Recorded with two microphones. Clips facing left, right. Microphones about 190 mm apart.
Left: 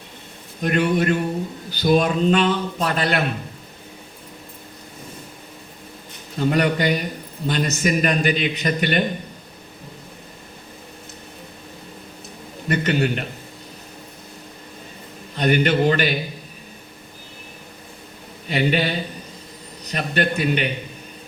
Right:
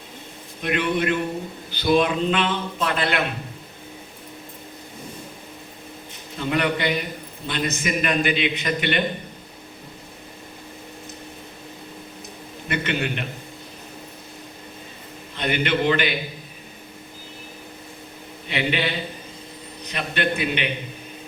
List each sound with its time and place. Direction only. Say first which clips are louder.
0.6 s a man's voice: left 3 dB; 40° left (ahead or behind)
6.4 s a man's voice: left 4 dB; 40° left (ahead or behind)
12.6 s a man's voice: left 5 dB; 40° left (ahead or behind)
15.4 s a man's voice: left 5 dB; 40° left (ahead or behind)
18.4 s a man's voice: left 4 dB; 40° left (ahead or behind)